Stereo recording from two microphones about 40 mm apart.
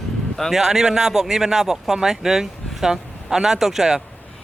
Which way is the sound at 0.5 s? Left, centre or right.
Centre.